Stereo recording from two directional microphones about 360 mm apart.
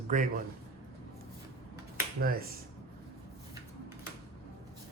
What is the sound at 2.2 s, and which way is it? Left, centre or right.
Speech, right.